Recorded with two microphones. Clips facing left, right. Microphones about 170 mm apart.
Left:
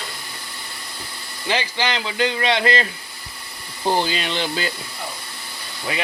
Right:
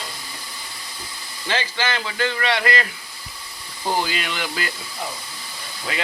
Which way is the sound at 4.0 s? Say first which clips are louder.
Left 3 dB; 25° left (ahead or behind).